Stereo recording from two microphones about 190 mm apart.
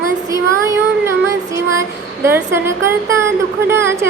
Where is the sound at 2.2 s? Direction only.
15° right (ahead or behind).